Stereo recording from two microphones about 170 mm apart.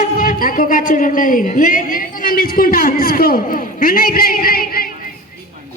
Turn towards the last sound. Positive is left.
turn(degrees=60)  # may be behind; listen again after turning